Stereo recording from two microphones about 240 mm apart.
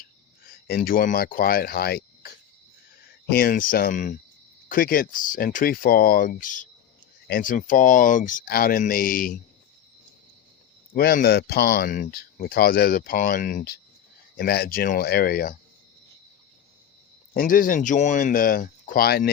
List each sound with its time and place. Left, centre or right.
0.7 s speech: left
10.9 s speech: left
17.3 s speech: left